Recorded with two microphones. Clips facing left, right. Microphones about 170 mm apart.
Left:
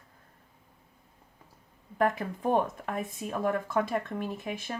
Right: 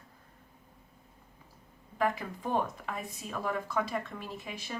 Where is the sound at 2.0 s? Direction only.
50° left (ahead or behind).